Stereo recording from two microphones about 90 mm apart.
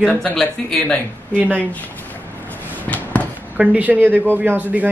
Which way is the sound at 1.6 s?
15° left (ahead or behind).